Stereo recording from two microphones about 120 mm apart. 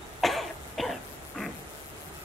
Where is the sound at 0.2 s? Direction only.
Centre (ahead or behind).